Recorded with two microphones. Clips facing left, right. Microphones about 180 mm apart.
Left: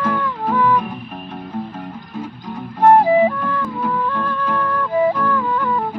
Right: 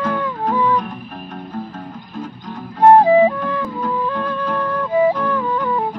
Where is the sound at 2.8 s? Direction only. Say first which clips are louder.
Right 2 dB; 20° right (ahead or behind).